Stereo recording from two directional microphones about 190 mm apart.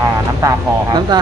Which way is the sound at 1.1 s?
20° right (ahead or behind).